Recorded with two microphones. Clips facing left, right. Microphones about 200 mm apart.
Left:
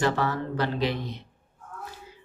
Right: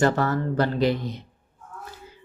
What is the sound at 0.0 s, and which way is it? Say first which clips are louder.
Speech: right 4 dB; 45° right (ahead or behind).